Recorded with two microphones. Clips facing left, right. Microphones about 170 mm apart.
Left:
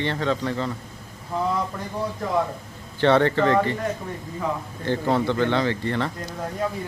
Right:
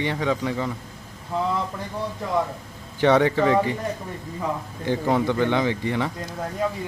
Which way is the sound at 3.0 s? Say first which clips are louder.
Even; 10° right (ahead or behind).